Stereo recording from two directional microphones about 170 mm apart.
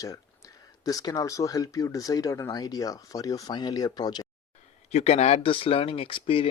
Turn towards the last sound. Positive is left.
turn(degrees=30)  # may be behind; listen again after turning